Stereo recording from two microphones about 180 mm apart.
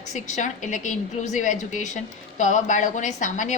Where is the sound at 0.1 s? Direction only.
40° left (ahead or behind).